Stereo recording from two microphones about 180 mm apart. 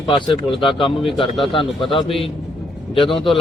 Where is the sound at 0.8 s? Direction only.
30° left (ahead or behind).